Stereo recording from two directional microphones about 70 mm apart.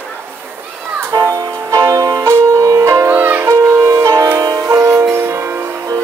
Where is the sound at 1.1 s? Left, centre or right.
Right.